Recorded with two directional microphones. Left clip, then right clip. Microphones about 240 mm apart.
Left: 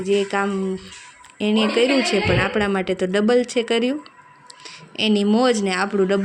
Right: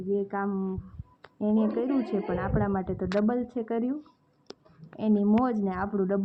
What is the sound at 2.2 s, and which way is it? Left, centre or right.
A woman's voice, left.